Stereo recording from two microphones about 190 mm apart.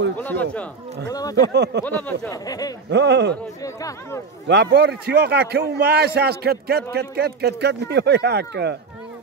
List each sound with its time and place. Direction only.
0.2 s speech: 10° left (ahead or behind)
1.4 s a man's voice: 65° right (ahead or behind)
1.9 s speech: 10° left (ahead or behind)
2.4 s speech: 20° left (ahead or behind)
2.9 s a man's voice: 65° right (ahead or behind)
3.6 s speech: 15° left (ahead or behind)
4.5 s a man's voice: 60° right (ahead or behind)